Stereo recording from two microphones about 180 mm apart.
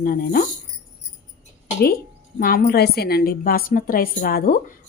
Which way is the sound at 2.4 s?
55° left (ahead or behind).